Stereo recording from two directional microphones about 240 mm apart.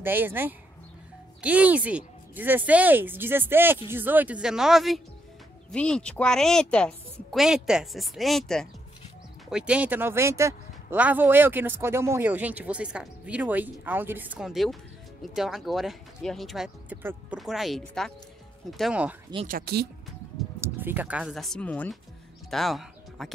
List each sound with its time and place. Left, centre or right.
0.0 s a woman's voice: centre
19.4 s speech: right
20.6 s a woman's voice: centre